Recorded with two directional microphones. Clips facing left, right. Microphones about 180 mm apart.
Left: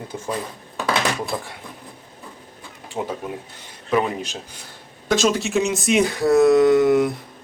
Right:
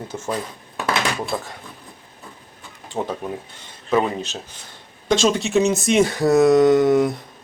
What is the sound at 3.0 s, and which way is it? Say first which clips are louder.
Speech: right 1 dB; 25° right (ahead or behind).